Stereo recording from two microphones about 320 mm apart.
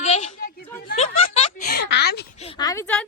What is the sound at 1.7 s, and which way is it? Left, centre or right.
Speech, left.